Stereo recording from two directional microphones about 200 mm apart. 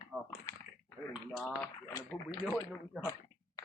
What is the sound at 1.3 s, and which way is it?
Speech, 5° left (ahead or behind).